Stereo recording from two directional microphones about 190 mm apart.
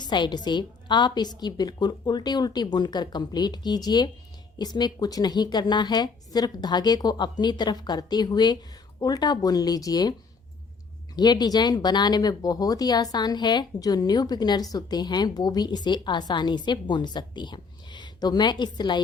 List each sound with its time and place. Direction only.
0.0 s speech: 25° left (ahead or behind)
11.2 s speech: 20° left (ahead or behind)